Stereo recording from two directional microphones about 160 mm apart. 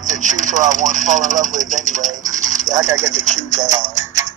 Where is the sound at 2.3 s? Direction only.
50° right (ahead or behind).